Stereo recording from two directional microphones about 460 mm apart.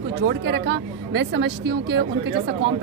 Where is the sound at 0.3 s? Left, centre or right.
Right.